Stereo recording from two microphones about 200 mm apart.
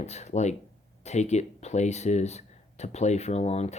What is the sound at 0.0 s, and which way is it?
Speech, 35° left (ahead or behind).